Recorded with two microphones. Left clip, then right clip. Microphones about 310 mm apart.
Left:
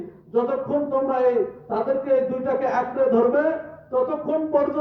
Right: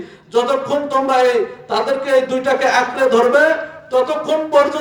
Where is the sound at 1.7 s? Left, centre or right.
Centre.